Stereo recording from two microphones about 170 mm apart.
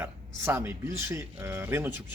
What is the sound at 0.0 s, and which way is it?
Speech, 15° right (ahead or behind).